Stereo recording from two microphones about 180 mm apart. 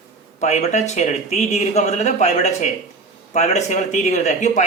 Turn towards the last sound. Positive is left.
turn(degrees=40)  # may be behind; listen again after turning